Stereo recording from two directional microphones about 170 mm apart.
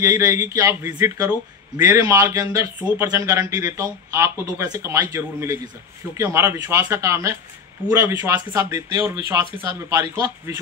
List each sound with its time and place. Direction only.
0.0 s speech: 15° right (ahead or behind)